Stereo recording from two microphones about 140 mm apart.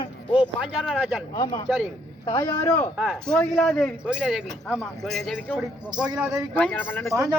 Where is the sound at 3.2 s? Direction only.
5° left (ahead or behind).